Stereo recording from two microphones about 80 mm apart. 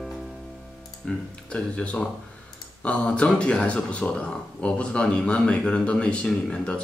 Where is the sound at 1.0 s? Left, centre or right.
Centre.